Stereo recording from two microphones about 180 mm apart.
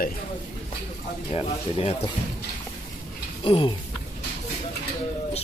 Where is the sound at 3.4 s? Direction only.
30° left (ahead or behind).